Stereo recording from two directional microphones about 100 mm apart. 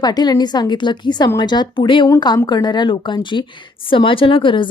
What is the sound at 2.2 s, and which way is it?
Speech, 45° left (ahead or behind).